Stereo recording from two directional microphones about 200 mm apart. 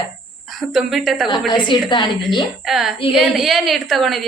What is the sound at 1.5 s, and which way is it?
Speech, 25° left (ahead or behind).